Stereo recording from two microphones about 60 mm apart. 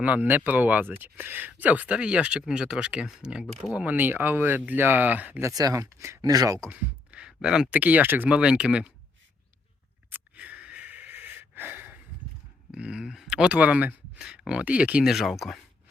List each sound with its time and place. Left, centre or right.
0.0 s speech: right
3.8 s speech: right
5.4 s speech: right
5.7 s speech: right
6.2 s speech: right
7.2 s a sound: centre
7.7 s speech: right
8.3 s speech: centre
10.1 s a sound: right
12.7 s speech: centre
14.2 s speech: centre
15.0 s speech: centre